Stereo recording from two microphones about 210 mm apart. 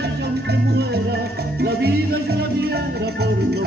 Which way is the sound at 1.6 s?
50° right (ahead or behind).